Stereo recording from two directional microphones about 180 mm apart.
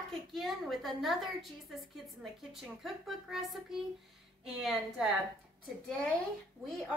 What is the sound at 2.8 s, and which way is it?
A woman's voice, centre (ahead or behind).